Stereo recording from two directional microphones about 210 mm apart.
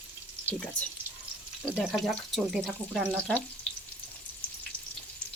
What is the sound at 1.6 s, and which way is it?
Speech, centre (ahead or behind).